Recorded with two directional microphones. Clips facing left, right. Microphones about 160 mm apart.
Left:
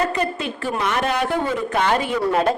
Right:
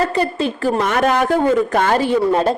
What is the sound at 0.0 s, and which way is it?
A woman's voice, 35° right (ahead or behind).